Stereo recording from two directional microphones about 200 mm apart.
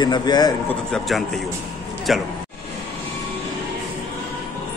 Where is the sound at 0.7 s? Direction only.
5° left (ahead or behind).